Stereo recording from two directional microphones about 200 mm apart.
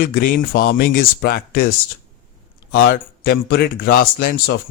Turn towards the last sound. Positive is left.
turn(degrees=50)  # may be behind; listen again after turning